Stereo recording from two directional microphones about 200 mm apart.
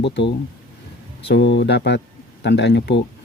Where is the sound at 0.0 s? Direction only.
60° left (ahead or behind).